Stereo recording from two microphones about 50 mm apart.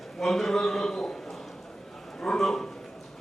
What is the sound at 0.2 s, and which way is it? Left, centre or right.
A man's voice, centre.